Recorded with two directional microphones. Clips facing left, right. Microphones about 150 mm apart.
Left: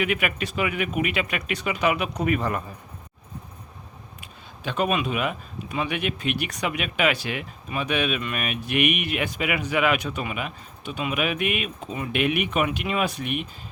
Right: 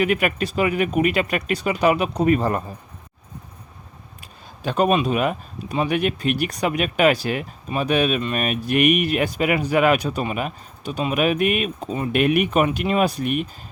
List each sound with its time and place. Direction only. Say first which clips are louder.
0.0 s speech: right 5 dB; 40° right (ahead or behind)
4.2 s speech: right 5 dB; 40° right (ahead or behind)